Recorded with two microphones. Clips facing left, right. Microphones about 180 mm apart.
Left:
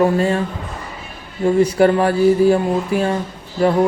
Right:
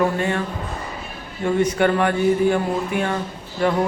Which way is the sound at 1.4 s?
30° left (ahead or behind).